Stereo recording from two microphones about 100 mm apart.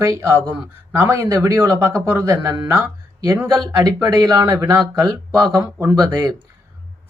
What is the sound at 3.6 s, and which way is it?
Speech, 40° right (ahead or behind).